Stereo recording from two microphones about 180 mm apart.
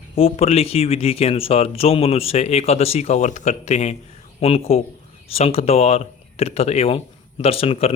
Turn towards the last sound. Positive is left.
turn(degrees=35)  # may be behind; listen again after turning